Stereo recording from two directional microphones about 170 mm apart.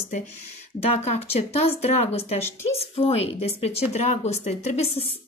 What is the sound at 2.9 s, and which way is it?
Speech, 35° left (ahead or behind).